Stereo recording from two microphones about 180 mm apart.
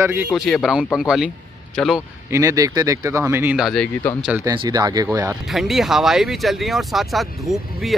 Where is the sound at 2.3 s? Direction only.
15° right (ahead or behind); by 4.2 s 10° left (ahead or behind).